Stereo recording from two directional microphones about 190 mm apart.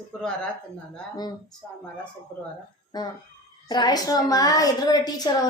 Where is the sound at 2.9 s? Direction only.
20° left (ahead or behind).